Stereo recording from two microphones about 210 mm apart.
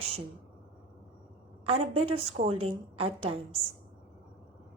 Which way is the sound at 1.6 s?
30° right (ahead or behind).